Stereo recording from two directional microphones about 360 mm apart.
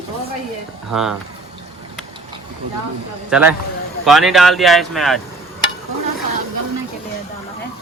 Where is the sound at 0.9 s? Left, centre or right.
Centre.